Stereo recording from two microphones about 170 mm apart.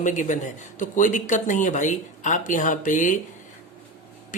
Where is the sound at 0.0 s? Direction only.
45° left (ahead or behind).